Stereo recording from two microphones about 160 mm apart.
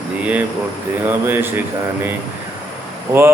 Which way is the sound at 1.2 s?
15° right (ahead or behind).